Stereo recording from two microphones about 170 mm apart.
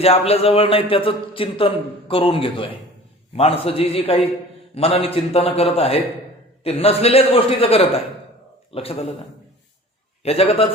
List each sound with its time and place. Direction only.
0.0 s a man's voice: 35° left (ahead or behind)
10.2 s a man's voice: 35° left (ahead or behind)